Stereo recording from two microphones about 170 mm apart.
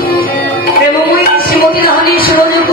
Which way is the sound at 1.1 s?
65° left (ahead or behind).